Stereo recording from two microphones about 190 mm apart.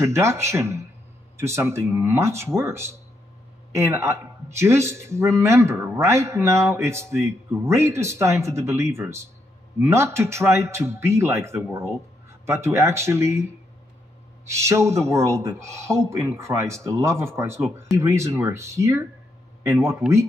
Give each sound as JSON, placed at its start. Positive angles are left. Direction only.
{"t": 0.0, "sound": "speech", "side_deg": -15}